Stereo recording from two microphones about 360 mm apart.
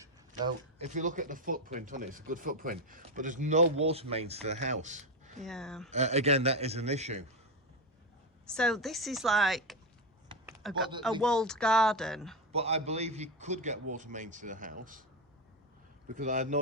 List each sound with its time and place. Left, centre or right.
0.3 s speech: right
5.4 s speech: centre
5.9 s a man's voice: centre
8.4 s speech: centre
12.5 s a man's voice: centre
16.1 s speech: right